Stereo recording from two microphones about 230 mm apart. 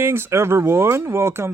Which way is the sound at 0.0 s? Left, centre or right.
Centre.